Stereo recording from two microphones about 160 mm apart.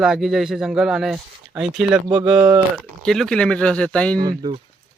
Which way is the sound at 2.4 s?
25° right (ahead or behind).